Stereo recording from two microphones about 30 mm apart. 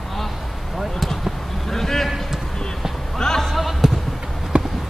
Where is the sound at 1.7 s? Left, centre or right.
Centre.